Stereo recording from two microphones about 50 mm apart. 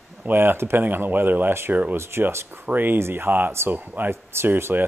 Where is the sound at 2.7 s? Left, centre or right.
Right.